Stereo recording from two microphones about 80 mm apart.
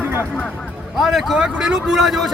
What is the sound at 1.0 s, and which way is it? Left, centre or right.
A man's voice, centre.